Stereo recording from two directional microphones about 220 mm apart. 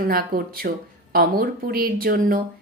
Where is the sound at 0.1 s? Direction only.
40° right (ahead or behind).